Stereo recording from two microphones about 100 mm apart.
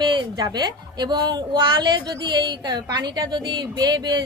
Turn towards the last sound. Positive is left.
turn(degrees=-45)  # may be behind; listen again after turning